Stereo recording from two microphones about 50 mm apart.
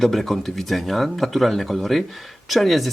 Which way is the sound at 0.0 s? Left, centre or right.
Centre.